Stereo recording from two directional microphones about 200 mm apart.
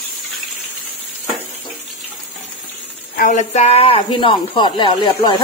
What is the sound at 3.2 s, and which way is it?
Speech, 40° left (ahead or behind).